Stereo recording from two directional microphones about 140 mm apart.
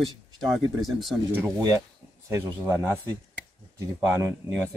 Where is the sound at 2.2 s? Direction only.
15° right (ahead or behind).